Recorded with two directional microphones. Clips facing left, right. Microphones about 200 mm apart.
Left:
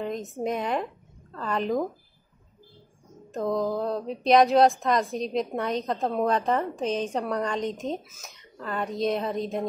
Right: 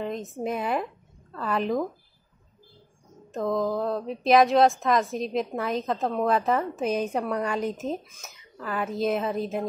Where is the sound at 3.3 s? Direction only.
Centre (ahead or behind).